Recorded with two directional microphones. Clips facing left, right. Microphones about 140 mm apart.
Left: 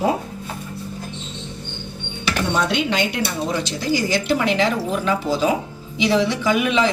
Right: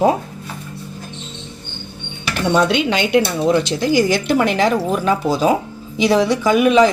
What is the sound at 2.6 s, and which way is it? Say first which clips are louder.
Speech: right 6 dB; 85° right.